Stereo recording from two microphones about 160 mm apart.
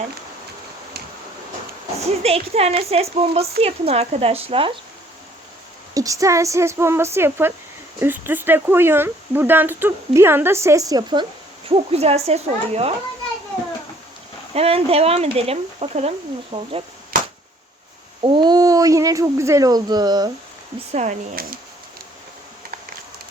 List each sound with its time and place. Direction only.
2.2 s speech: 40° right (ahead or behind)
5.9 s speech: 20° right (ahead or behind)
11.7 s speech: 40° right (ahead or behind)
14.5 s speech: 40° right (ahead or behind)
18.2 s speech: 30° right (ahead or behind)
20.9 s speech: 45° right (ahead or behind)
21.4 s speech: 70° right (ahead or behind)